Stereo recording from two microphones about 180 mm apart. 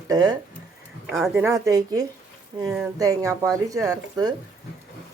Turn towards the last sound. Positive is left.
turn(degrees=-20)  # may be behind; listen again after turning